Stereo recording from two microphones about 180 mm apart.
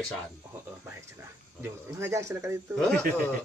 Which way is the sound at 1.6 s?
15° right (ahead or behind).